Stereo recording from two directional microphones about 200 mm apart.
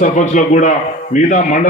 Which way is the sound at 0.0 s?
35° left (ahead or behind).